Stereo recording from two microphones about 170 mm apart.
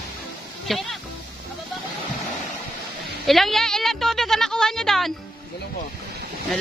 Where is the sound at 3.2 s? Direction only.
Centre (ahead or behind).